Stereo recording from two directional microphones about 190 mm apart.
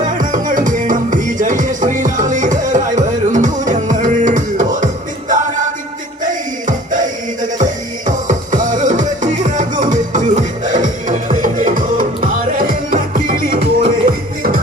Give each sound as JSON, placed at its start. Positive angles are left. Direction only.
{"t": 0.2, "sound": "music", "side_deg": -45}